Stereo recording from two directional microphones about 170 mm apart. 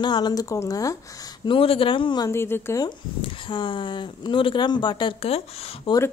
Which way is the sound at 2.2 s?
15° left (ahead or behind).